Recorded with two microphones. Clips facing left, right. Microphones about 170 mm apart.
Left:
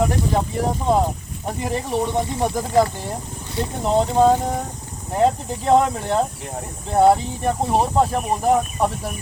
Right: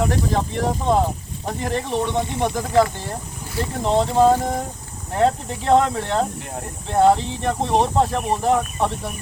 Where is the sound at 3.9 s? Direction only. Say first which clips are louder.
Even; 5° left (ahead or behind).